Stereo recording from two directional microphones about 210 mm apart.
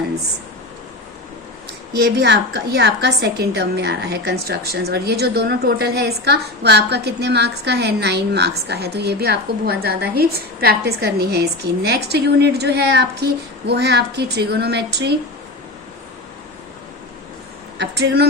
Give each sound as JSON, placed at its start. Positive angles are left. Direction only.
{"t": 2.0, "sound": "a woman's voice", "side_deg": -50}
{"t": 17.7, "sound": "speech", "side_deg": -55}